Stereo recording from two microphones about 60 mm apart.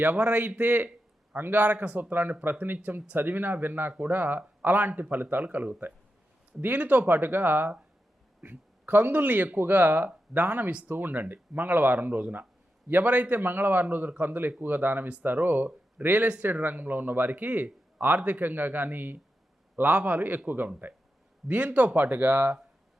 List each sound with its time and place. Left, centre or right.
0.2 s speech: right
20.7 s speech: right